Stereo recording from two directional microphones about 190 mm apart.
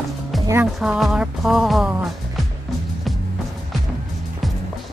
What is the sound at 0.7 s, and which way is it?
Music, centre (ahead or behind).